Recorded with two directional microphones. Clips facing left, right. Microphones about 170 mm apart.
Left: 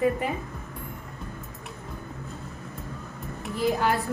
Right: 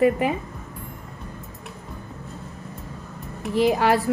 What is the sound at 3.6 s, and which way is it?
Speech, 85° right.